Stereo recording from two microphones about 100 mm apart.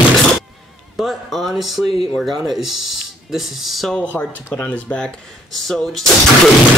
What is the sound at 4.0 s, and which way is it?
Speech, 15° left (ahead or behind).